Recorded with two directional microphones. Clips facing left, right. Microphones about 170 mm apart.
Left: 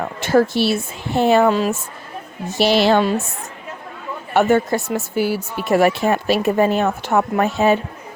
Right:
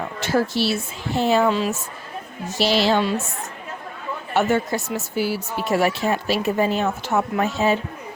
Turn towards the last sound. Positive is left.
turn(degrees=55)  # may be behind; listen again after turning